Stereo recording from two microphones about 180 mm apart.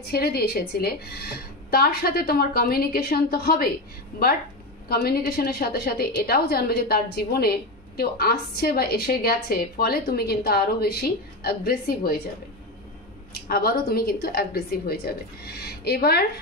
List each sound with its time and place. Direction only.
0.0 s a woman's voice: 60° left (ahead or behind)
13.3 s a woman's voice: 60° left (ahead or behind)